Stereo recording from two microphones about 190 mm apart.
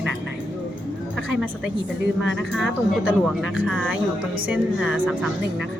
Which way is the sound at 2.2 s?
Centre (ahead or behind).